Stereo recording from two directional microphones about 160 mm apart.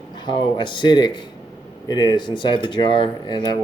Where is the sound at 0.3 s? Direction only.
30° left (ahead or behind).